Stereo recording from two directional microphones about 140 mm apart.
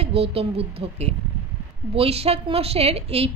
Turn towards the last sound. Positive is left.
turn(degrees=-45)  # may be behind; listen again after turning